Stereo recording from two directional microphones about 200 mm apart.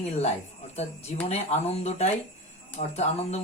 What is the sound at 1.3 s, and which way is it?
Speech, 30° left (ahead or behind).